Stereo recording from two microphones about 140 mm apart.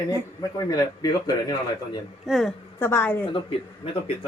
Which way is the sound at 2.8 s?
15° left (ahead or behind).